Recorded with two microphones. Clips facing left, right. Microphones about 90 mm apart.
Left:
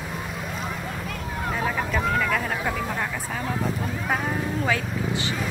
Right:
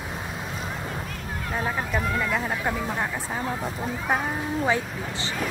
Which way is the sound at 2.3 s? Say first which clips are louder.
Even; 20° right (ahead or behind).